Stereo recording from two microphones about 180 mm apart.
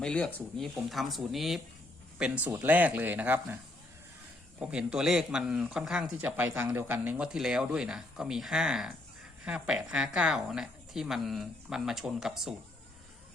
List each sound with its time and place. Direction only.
0.0 s speech: 5° left (ahead or behind); by 3.6 s 10° right (ahead or behind)
4.6 s speech: 5° right (ahead or behind)